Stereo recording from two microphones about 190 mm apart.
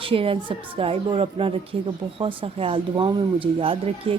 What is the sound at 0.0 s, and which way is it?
A woman's voice, 30° right (ahead or behind).